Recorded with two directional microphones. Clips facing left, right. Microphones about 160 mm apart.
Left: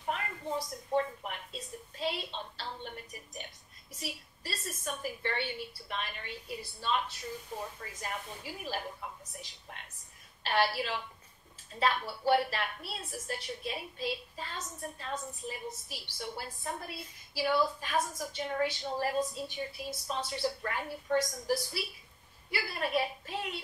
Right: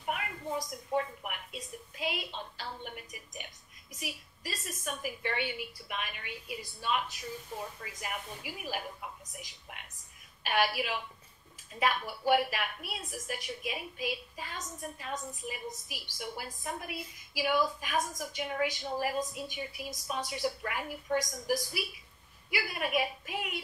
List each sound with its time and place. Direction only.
0.0 s a woman's voice: 10° right (ahead or behind)